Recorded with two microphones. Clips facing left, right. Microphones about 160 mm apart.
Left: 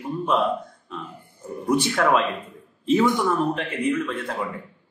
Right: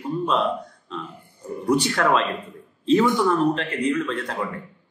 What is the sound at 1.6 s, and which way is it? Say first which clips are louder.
A man's voice: even; 5° left (ahead or behind).